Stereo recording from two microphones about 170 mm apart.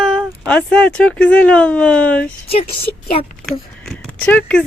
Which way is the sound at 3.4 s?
Centre (ahead or behind).